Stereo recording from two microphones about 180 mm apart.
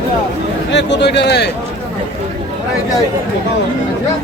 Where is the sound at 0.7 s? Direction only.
75° left (ahead or behind).